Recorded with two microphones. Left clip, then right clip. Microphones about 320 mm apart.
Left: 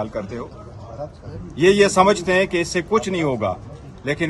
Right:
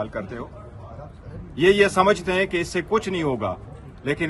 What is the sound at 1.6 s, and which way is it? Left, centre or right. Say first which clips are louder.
Speech: left 3 dB; centre.